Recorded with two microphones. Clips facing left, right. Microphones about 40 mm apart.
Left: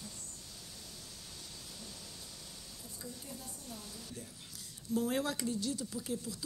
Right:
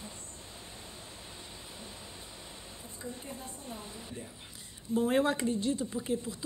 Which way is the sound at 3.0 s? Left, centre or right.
Right.